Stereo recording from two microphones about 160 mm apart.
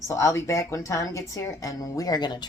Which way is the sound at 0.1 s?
20° left (ahead or behind).